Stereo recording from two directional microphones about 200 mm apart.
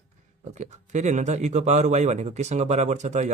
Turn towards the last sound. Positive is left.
turn(degrees=-35)  # may be behind; listen again after turning